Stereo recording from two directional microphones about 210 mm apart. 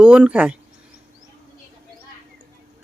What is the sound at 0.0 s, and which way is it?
Speech, 5° right (ahead or behind).